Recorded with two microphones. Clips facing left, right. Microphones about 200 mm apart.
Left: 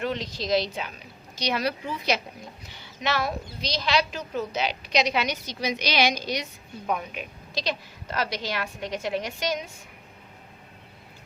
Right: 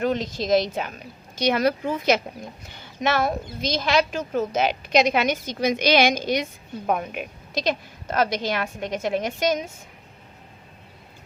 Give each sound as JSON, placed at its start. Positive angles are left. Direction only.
{"t": 0.0, "sound": "a woman's voice", "side_deg": -45}